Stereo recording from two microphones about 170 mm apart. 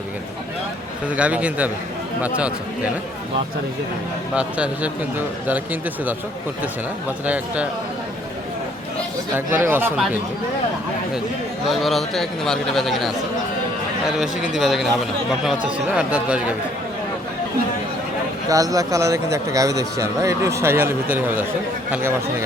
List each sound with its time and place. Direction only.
1.1 s speech: 10° right (ahead or behind)
4.4 s speech: 5° right (ahead or behind)
7.3 s speech: 10° right (ahead or behind)
9.3 s speech: 15° right (ahead or behind)
11.7 s speech: centre (ahead or behind)
14.2 s speech: 5° right (ahead or behind)
18.4 s speech: 20° right (ahead or behind)